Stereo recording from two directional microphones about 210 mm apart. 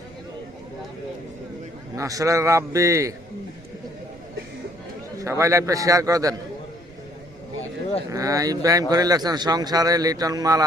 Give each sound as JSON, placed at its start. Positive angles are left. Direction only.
{"t": 2.0, "sound": "a man's voice", "side_deg": -15}
{"t": 5.2, "sound": "a man's voice", "side_deg": -15}
{"t": 8.1, "sound": "a man's voice", "side_deg": -15}